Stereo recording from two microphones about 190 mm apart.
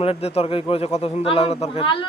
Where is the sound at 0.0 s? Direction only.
30° left (ahead or behind).